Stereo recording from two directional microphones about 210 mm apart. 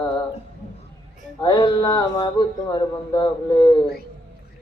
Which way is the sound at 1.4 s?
25° left (ahead or behind).